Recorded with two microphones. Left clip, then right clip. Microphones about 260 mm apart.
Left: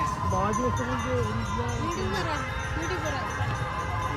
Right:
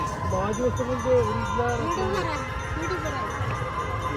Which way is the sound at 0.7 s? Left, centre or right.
Centre.